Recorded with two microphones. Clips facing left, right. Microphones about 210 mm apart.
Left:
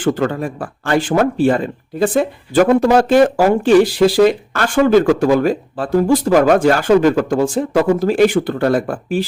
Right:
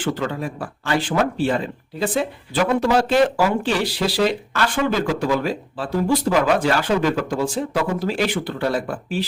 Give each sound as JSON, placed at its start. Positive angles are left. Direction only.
{"t": 0.0, "sound": "speech", "side_deg": 50}